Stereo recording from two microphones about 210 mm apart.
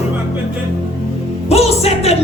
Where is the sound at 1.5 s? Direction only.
30° left (ahead or behind).